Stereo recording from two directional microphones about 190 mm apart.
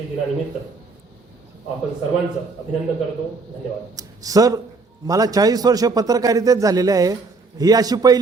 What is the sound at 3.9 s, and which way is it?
A man's voice, 20° right (ahead or behind).